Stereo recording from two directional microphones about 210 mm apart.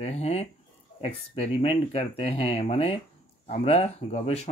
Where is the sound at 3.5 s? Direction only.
30° left (ahead or behind).